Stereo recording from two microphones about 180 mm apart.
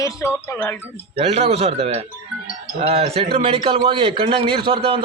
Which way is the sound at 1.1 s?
35° right (ahead or behind).